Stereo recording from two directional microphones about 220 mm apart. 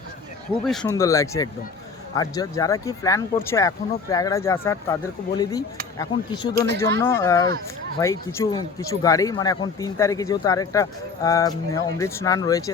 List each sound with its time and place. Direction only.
0.7 s speech: 5° left (ahead or behind)
0.9 s speech: 15° left (ahead or behind)